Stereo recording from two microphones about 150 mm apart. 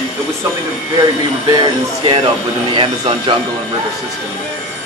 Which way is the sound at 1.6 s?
35° right (ahead or behind).